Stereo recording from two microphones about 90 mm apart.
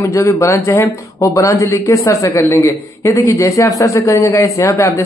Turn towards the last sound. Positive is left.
turn(degrees=35)  # may be behind; listen again after turning